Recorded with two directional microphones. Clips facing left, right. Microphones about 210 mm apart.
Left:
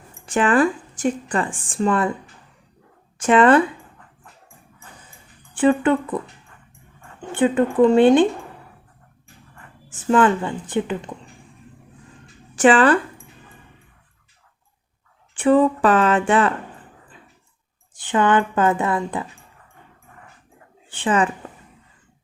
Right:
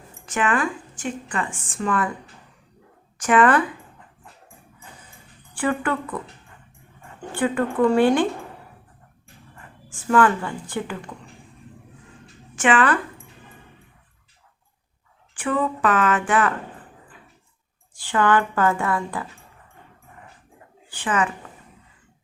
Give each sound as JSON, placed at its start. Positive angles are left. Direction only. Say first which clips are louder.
{"t": 0.3, "sound": "a woman's voice", "louder": "left 6 dB", "side_deg": 30}
{"t": 3.2, "sound": "speech", "louder": "left 4 dB", "side_deg": 25}
{"t": 5.5, "sound": "speech", "louder": "left 7 dB", "side_deg": 20}
{"t": 7.2, "sound": "speech", "louder": "left 5 dB", "side_deg": 20}
{"t": 9.9, "sound": "speech", "louder": "left 2 dB", "side_deg": 20}
{"t": 12.5, "sound": "speech", "louder": "left 5 dB", "side_deg": 35}
{"t": 15.4, "sound": "speech", "louder": "left 8 dB", "side_deg": 30}
{"t": 17.9, "sound": "speech", "louder": "left 2 dB", "side_deg": 20}
{"t": 20.9, "sound": "speech", "louder": "left 4 dB", "side_deg": 25}